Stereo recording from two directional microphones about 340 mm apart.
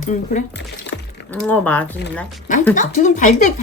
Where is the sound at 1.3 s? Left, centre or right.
Centre.